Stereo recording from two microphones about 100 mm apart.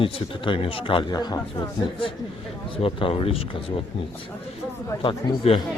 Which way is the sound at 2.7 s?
65° left (ahead or behind).